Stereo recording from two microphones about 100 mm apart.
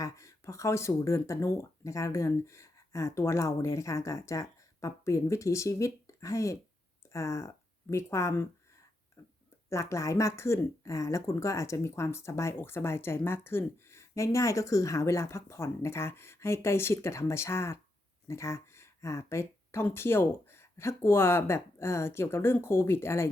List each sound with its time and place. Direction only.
0.0 s speech: 30° left (ahead or behind)
9.2 s a sound: 30° left (ahead or behind)
9.6 s speech: 30° left (ahead or behind)